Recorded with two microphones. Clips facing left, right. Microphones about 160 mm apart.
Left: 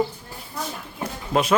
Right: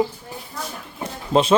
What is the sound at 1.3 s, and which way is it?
Speech, 25° right (ahead or behind).